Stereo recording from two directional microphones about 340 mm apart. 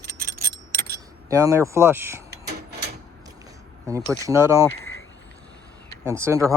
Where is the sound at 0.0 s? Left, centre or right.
Right.